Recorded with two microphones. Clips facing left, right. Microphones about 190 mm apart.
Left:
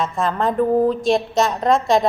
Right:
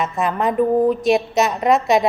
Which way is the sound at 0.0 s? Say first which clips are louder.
Even; 20° right (ahead or behind).